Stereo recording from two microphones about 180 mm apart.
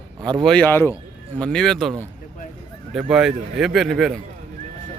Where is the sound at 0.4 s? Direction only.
5° left (ahead or behind).